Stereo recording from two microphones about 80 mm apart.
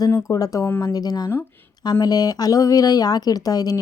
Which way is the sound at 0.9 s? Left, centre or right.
Left.